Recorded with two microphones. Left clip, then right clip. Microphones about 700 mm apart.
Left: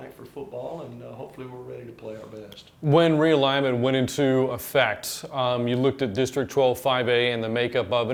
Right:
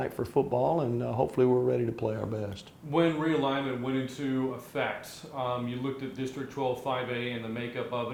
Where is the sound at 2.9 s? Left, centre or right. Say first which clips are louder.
Left 8 dB; left.